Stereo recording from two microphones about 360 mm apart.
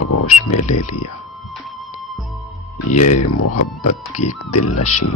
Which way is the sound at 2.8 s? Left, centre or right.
Left.